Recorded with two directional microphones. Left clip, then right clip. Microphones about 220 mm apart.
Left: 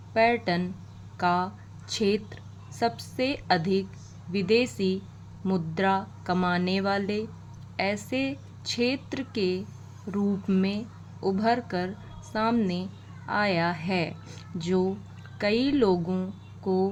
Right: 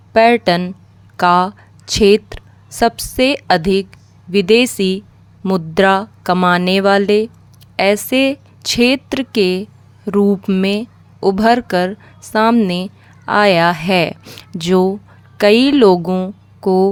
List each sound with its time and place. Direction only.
0.1 s a woman's voice: 55° right (ahead or behind)